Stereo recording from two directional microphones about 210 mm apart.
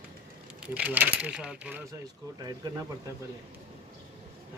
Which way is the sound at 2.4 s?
20° right (ahead or behind).